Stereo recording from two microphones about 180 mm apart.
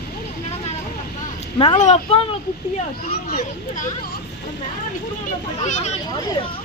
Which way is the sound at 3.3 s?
45° left (ahead or behind).